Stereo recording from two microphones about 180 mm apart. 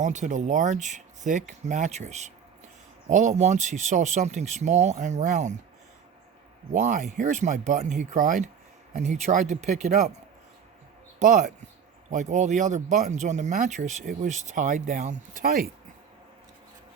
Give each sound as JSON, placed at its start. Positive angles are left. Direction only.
{"t": 0.0, "sound": "speech", "side_deg": -40}
{"t": 6.7, "sound": "speech", "side_deg": -45}
{"t": 11.2, "sound": "speech", "side_deg": -45}